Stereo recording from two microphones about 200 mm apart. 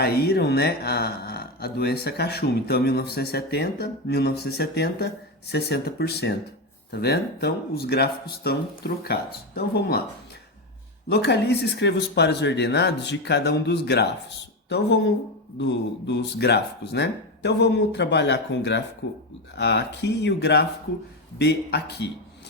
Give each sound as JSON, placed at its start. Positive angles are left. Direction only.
{"t": 0.0, "sound": "speech", "side_deg": 50}
{"t": 11.1, "sound": "speech", "side_deg": 55}